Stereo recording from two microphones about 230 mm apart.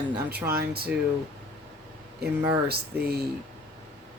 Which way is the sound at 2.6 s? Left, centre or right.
Right.